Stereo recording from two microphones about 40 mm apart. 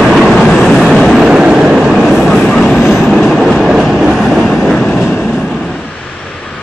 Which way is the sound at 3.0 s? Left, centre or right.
Centre.